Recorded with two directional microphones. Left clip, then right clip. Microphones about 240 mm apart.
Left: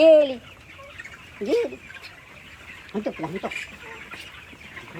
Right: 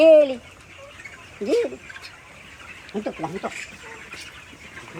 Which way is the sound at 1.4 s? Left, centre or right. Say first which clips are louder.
Right 1 dB; centre.